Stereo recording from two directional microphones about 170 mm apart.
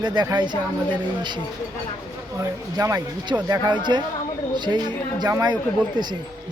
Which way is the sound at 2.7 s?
20° right (ahead or behind).